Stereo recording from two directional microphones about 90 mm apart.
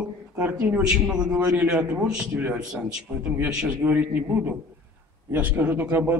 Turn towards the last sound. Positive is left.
turn(degrees=-20)  # may be behind; listen again after turning